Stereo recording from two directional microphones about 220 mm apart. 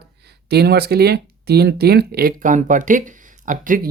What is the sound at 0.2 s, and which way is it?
Speech, 45° right (ahead or behind).